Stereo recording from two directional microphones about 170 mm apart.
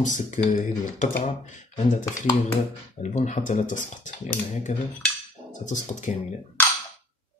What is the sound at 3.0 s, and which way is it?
Speech, 45° left (ahead or behind).